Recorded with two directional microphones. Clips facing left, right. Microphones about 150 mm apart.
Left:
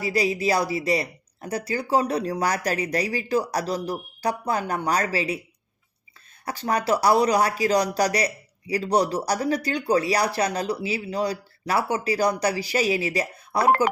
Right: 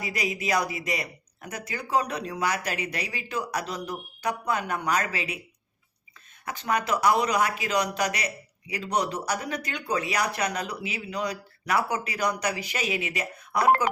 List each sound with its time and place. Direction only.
0.0 s speech: 30° left (ahead or behind)
6.4 s speech: 35° left (ahead or behind)